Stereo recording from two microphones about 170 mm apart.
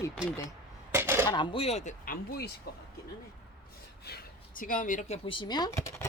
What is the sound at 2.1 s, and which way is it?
Speech, 70° left (ahead or behind).